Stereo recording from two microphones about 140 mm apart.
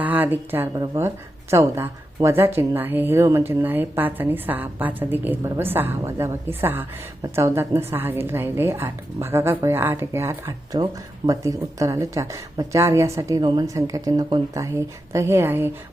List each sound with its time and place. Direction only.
0.0 s a woman's voice: 10° right (ahead or behind)